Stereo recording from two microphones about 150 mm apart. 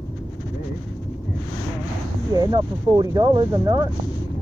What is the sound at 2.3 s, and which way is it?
Speech, 25° right (ahead or behind).